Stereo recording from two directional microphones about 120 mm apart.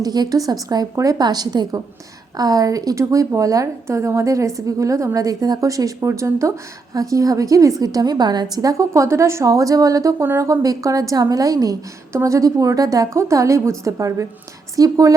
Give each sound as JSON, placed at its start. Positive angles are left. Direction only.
{"t": 0.0, "sound": "a woman's voice", "side_deg": -35}